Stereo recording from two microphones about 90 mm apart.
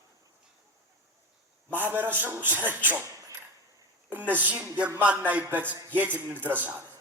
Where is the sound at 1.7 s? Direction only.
20° right (ahead or behind).